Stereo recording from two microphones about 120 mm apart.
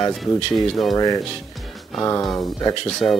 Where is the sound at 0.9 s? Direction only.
35° left (ahead or behind).